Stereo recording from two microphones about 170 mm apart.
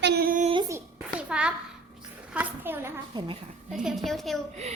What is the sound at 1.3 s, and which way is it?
A woman's voice, 5° right (ahead or behind).